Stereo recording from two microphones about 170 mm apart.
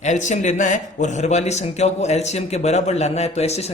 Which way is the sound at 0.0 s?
45° left (ahead or behind).